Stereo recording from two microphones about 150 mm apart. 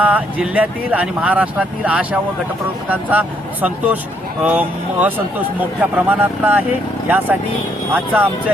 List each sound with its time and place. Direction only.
0.0 s speech: 10° right (ahead or behind)
7.9 s speech: 10° right (ahead or behind)